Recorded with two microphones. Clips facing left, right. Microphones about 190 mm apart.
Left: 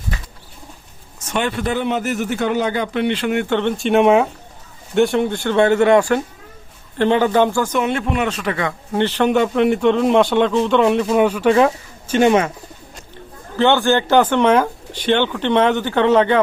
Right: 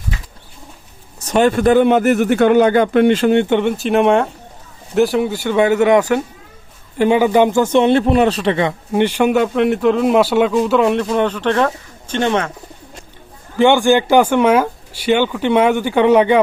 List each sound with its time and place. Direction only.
1.2 s speech: 40° right (ahead or behind)
3.3 s a man's voice: 15° right (ahead or behind)
7.0 s a man's voice: 10° right (ahead or behind); by 12.5 s 5° left (ahead or behind)
13.6 s a man's voice: 15° right (ahead or behind)